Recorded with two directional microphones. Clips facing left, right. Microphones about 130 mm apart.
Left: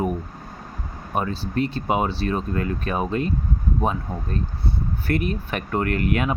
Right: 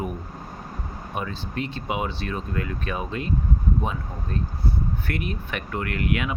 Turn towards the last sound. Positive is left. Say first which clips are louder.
# left 4 dB
turn(degrees=40)  # may be behind; listen again after turning